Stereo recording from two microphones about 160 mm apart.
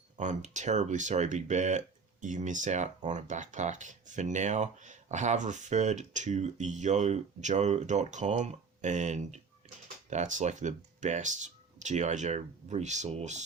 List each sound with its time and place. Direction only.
0.2 s speech: 50° right (ahead or behind)